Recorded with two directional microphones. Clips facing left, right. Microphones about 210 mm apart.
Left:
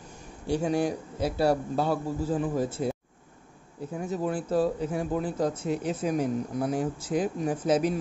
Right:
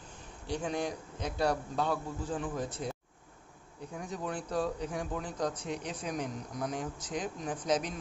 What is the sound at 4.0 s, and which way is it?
Speech, 5° left (ahead or behind).